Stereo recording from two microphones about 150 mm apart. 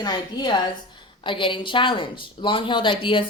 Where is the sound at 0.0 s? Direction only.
30° left (ahead or behind).